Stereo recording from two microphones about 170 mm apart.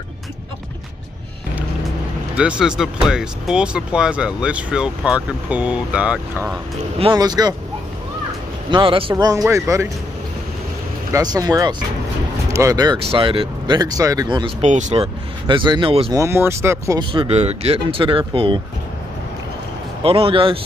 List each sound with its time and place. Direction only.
2.3 s speech: 5° right (ahead or behind)
7.0 s speech: 25° right (ahead or behind)
8.6 s speech: 30° right (ahead or behind)
9.1 s speech: 20° right (ahead or behind)
11.1 s speech: 20° right (ahead or behind)
14.6 s speech: 45° right (ahead or behind)
15.4 s speech: 25° right (ahead or behind)
16.1 s speech: 15° right (ahead or behind)
17.1 s speech: 35° right (ahead or behind)
20.0 s speech: 35° right (ahead or behind)